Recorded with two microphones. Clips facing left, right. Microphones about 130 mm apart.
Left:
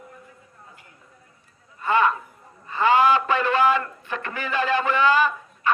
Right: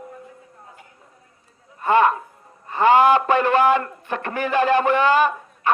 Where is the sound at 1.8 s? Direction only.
55° right (ahead or behind).